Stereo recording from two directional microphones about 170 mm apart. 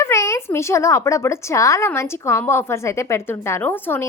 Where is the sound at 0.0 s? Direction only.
15° left (ahead or behind).